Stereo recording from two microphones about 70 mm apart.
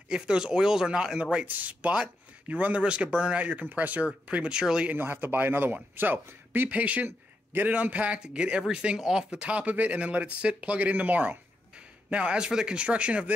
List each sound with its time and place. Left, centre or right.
0.1 s speech: centre
4.9 s speech: right